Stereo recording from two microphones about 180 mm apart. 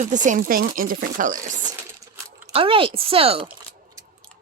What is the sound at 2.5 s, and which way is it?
Speech, 30° right (ahead or behind).